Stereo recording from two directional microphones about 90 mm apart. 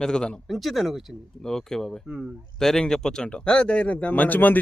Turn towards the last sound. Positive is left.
turn(degrees=20)  # may be behind; listen again after turning